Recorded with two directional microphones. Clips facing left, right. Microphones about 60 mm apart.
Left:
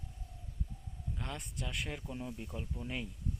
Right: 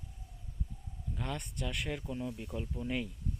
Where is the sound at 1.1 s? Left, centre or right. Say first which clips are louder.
Right 4 dB; centre.